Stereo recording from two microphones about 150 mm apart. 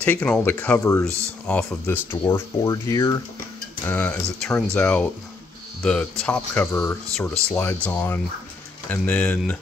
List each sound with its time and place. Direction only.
0.0 s speech: 10° left (ahead or behind)